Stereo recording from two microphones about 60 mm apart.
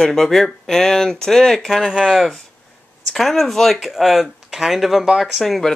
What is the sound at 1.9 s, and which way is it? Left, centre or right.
Speech, centre.